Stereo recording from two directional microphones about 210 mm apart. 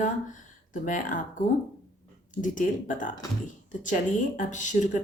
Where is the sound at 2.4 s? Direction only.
40° left (ahead or behind).